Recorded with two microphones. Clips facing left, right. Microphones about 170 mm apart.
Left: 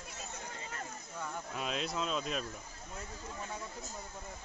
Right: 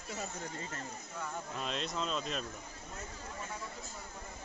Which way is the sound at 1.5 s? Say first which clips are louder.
Left 2 dB; 5° left (ahead or behind).